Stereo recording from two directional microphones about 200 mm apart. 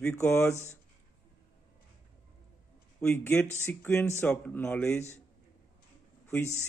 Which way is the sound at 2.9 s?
10° left (ahead or behind).